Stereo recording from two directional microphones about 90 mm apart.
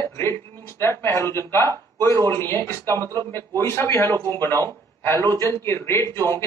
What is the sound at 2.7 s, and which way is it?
Speech, 25° left (ahead or behind).